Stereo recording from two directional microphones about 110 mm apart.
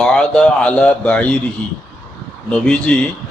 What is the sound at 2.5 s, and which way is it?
Speech, 10° left (ahead or behind).